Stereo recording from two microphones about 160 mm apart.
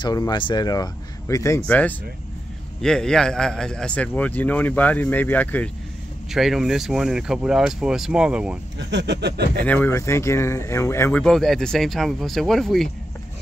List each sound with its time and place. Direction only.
0.0 s speech: 25° left (ahead or behind)
1.7 s a man's voice: 10° left (ahead or behind)
6.3 s speech: centre (ahead or behind)
8.9 s a sound: 90° right
9.7 s speech: 15° left (ahead or behind)